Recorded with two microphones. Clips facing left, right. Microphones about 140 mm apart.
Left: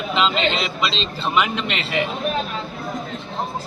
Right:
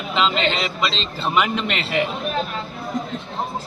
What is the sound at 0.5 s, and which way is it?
Speech, 40° right (ahead or behind).